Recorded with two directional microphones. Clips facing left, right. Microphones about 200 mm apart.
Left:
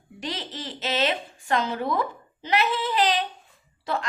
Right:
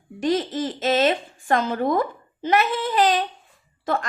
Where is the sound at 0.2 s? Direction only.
50° right (ahead or behind).